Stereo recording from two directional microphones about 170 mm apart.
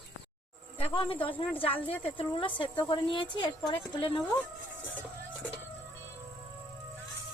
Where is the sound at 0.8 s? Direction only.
35° left (ahead or behind).